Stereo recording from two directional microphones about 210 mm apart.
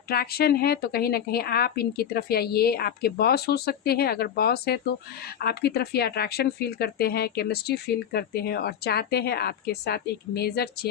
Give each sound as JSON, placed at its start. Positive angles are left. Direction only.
{"t": 0.1, "sound": "a woman's voice", "side_deg": 45}